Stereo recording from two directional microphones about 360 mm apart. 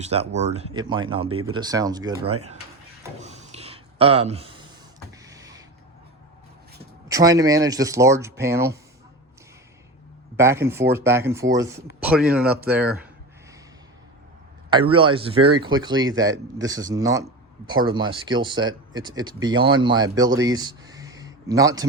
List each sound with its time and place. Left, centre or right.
0.0 s speech: centre
1.3 s speech: right
1.5 s speech: centre
3.2 s a sound: centre
7.1 s speech: centre
10.3 s speech: centre
14.7 s speech: centre